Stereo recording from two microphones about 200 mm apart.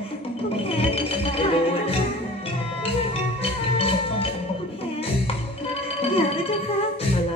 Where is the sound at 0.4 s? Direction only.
30° left (ahead or behind).